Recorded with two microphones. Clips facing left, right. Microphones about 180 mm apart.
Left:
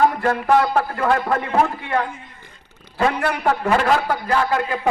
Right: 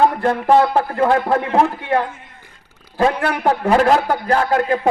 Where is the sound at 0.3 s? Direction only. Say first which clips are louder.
Right 3 dB; 25° right (ahead or behind).